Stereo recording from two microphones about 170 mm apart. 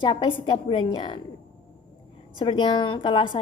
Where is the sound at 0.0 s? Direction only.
30° left (ahead or behind).